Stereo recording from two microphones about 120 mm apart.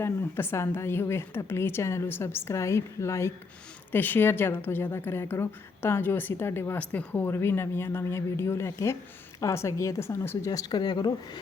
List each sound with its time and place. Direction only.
0.0 s a woman's voice: 20° left (ahead or behind); by 11.1 s 35° left (ahead or behind)